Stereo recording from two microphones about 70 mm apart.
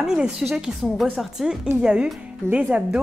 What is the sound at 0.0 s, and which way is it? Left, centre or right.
A woman's voice, centre.